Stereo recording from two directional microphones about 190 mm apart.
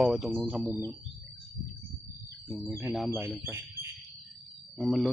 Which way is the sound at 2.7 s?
15° right (ahead or behind).